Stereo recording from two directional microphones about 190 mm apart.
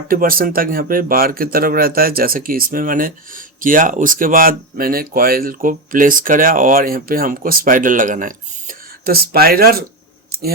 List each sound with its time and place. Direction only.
0.1 s speech: 50° right (ahead or behind)